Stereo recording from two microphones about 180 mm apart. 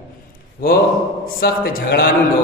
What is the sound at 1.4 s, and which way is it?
Speech, 55° left (ahead or behind).